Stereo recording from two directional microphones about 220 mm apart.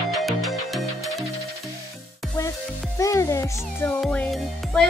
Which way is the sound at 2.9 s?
15° left (ahead or behind).